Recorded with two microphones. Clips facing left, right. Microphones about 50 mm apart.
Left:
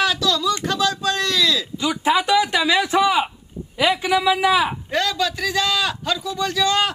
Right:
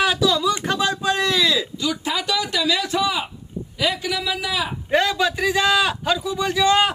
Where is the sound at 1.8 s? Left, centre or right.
Left.